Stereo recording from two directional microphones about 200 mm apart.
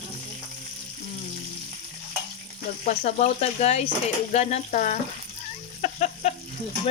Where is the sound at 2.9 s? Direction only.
35° left (ahead or behind).